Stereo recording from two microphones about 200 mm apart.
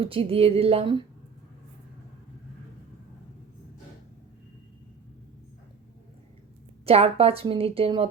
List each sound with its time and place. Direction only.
0.0 s a woman's voice: 30° right (ahead or behind)
6.8 s a woman's voice: 30° right (ahead or behind)